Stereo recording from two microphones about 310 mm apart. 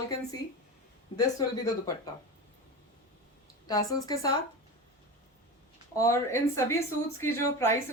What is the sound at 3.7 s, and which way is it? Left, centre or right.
Speech, centre.